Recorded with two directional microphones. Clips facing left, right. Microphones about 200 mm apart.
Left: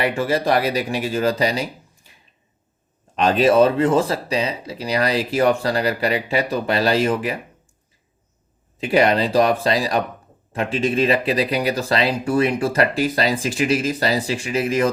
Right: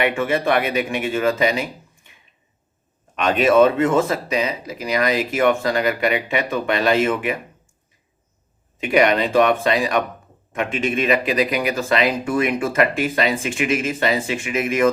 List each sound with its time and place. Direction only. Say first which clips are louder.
0.0 s speech: even; 35° left (ahead or behind)
8.8 s speech: even; 35° left (ahead or behind)